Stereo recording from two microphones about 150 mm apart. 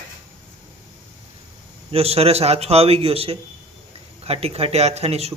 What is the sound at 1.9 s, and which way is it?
Speech, 40° right (ahead or behind).